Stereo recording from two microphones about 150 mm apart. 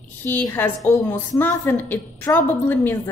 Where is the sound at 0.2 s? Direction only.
15° left (ahead or behind).